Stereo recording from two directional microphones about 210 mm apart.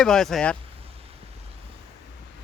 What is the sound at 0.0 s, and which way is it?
Speech, 5° left (ahead or behind).